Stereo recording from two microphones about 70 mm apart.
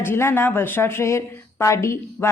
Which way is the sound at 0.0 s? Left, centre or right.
Left.